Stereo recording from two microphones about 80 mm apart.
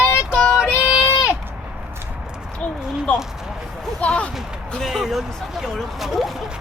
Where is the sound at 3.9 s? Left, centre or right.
Centre.